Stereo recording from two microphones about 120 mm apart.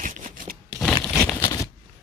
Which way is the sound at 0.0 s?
90° right.